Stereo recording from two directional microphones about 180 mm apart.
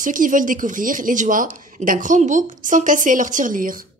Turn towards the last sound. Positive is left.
turn(degrees=-50)  # may be behind; listen again after turning